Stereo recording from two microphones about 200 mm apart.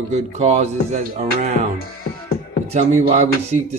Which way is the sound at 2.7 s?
35° right (ahead or behind).